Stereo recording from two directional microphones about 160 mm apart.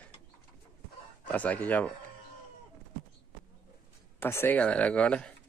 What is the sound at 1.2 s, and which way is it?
Speech, 10° left (ahead or behind).